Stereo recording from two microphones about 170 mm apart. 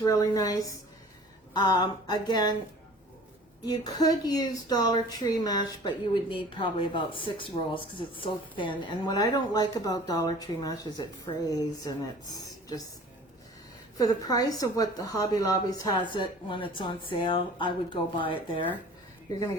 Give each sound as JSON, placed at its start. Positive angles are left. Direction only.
{"t": 0.0, "sound": "speech", "side_deg": 20}
{"t": 3.7, "sound": "speech", "side_deg": 20}
{"t": 14.0, "sound": "speech", "side_deg": 20}